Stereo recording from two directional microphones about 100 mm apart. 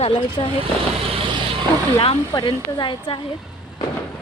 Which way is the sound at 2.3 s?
45° left (ahead or behind).